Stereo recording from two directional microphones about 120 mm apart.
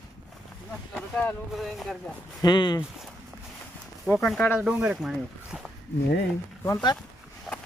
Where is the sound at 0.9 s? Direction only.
10° left (ahead or behind).